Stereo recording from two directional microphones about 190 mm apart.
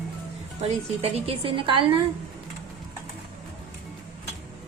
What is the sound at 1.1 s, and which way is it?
Speech, 30° right (ahead or behind).